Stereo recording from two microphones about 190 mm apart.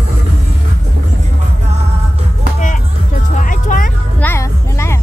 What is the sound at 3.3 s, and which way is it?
Music, 40° left (ahead or behind).